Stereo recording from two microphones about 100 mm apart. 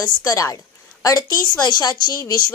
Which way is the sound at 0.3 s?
35° left (ahead or behind).